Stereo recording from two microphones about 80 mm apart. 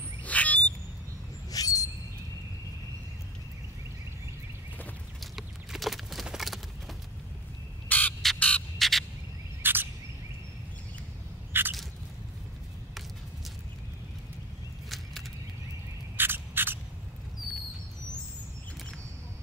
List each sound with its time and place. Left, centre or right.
0.2 s bird: centre
1.5 s a sound: left
5.2 s clip-clop: centre
7.9 s bird: left
8.4 s frog: centre
8.7 s frog: centre
9.6 s cricket: right
11.5 s a sound: right
16.2 s rodents: right